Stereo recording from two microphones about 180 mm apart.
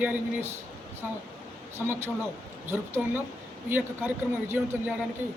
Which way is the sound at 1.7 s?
15° right (ahead or behind).